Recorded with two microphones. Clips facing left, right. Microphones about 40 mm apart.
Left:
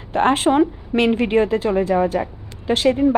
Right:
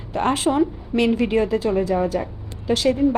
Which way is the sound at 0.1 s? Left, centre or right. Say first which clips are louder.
Left 4 dB; left.